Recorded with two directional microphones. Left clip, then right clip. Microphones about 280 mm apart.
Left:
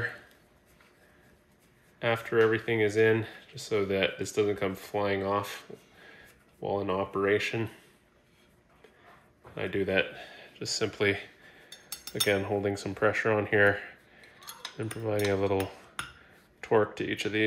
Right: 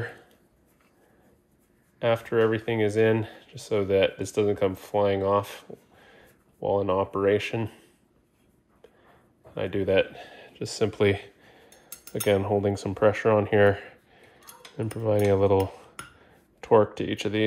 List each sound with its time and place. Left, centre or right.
2.0 s speech: right
9.6 s speech: right
12.1 s cutlery: right